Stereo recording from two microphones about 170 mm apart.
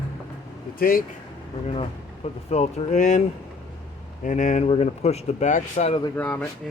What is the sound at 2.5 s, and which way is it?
Speech, 40° left (ahead or behind).